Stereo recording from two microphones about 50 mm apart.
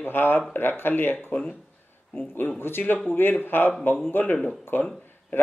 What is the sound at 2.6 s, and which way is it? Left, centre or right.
Speech, left.